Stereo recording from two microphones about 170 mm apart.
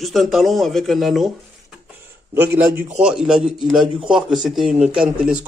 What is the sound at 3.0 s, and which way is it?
A man's voice, 5° right (ahead or behind).